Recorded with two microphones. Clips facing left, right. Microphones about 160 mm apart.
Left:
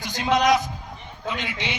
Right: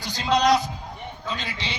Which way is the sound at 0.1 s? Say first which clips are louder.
Left 1 dB; 50° left (ahead or behind).